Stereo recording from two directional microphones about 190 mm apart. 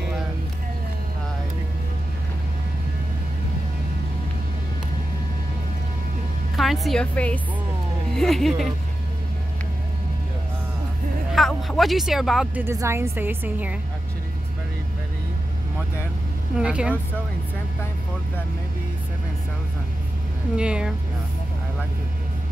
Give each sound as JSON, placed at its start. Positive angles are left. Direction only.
{"t": 6.5, "sound": "a woman's voice", "side_deg": 0}
{"t": 11.3, "sound": "speech", "side_deg": 0}
{"t": 12.6, "sound": "a woman's voice", "side_deg": -15}
{"t": 16.5, "sound": "speech", "side_deg": -5}
{"t": 20.5, "sound": "speech", "side_deg": -5}